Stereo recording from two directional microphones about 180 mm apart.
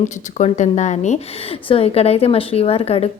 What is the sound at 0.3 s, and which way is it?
A woman's voice, 40° left (ahead or behind).